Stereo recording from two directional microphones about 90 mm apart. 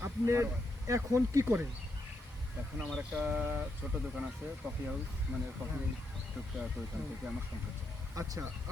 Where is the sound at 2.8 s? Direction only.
5° left (ahead or behind).